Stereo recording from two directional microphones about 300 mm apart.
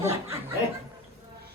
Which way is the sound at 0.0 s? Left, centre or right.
Centre.